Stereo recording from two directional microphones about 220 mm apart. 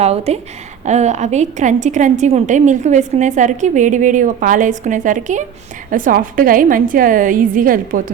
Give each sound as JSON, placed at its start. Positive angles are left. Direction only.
{"t": 0.0, "sound": "a woman's voice", "side_deg": -30}